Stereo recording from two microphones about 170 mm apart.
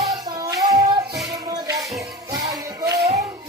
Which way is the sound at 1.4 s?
20° right (ahead or behind).